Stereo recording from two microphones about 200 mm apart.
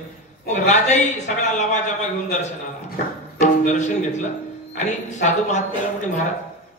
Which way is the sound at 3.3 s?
35° left (ahead or behind).